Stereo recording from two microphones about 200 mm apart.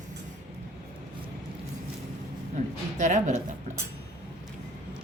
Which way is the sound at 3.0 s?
35° right (ahead or behind).